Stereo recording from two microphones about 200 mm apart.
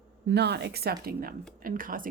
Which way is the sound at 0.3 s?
55° right (ahead or behind).